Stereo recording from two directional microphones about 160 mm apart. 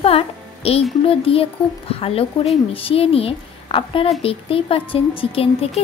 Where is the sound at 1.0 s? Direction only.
35° left (ahead or behind).